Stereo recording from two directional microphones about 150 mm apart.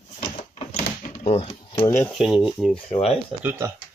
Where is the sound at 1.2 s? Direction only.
40° left (ahead or behind).